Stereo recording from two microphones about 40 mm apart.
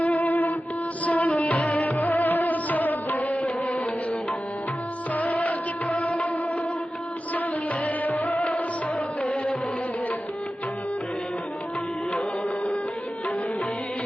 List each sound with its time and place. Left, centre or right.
0.0 s music: left
5.1 s music: left
7.9 s music: left